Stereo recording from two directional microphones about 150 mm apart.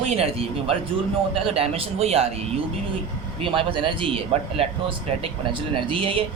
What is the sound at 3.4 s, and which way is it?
Speech, 35° right (ahead or behind).